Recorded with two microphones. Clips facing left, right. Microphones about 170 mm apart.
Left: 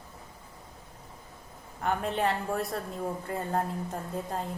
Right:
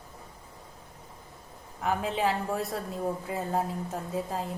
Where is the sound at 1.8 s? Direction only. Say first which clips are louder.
Even; centre (ahead or behind).